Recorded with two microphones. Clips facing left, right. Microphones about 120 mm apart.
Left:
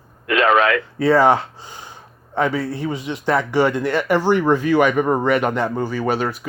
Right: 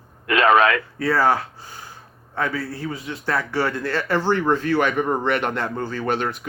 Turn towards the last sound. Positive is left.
turn(degrees=5)  # may be behind; listen again after turning